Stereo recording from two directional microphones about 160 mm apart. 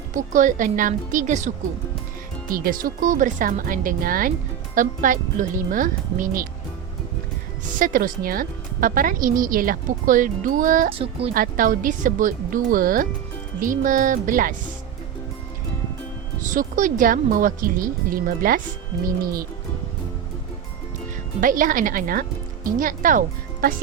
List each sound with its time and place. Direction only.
0.1 s speech: 55° right (ahead or behind)
2.5 s a woman's voice: 60° right (ahead or behind)
7.8 s a woman's voice: 60° right (ahead or behind)
16.4 s a woman's voice: 55° right (ahead or behind)
21.4 s a woman's voice: 60° right (ahead or behind)